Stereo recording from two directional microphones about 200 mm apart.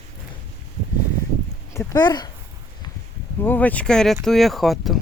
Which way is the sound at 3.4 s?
10° left (ahead or behind).